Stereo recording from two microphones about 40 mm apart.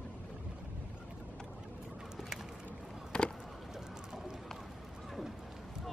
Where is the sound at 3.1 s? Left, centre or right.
Left.